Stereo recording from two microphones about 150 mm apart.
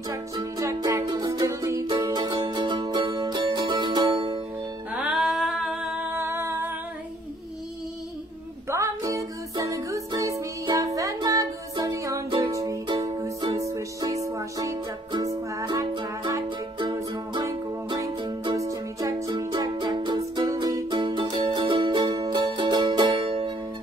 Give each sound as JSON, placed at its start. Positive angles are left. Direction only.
{"t": 0.1, "sound": "music", "side_deg": -25}
{"t": 4.9, "sound": "a sound", "side_deg": -5}
{"t": 6.2, "sound": "music", "side_deg": -15}
{"t": 8.6, "sound": "music", "side_deg": -20}